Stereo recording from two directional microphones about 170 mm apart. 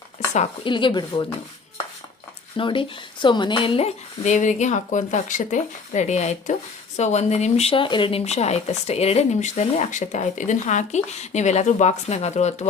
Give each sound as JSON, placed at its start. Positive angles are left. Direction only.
{"t": 0.6, "sound": "a woman's voice", "side_deg": 30}
{"t": 2.6, "sound": "a woman's voice", "side_deg": 30}